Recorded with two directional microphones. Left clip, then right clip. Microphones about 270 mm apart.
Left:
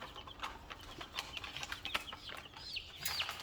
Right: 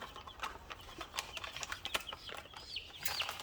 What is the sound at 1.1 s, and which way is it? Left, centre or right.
Bird flight, right.